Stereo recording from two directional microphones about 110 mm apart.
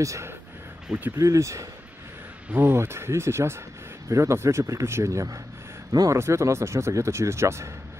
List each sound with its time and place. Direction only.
0.0 s speech: 30° right (ahead or behind)
0.8 s speech: 15° right (ahead or behind)
1.1 s speech: 30° right (ahead or behind)